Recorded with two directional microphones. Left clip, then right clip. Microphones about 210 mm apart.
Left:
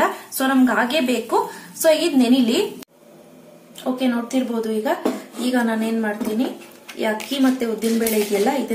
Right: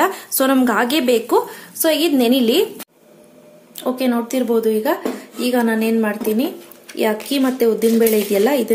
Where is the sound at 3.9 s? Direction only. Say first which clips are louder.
Right 2 dB; 40° right (ahead or behind).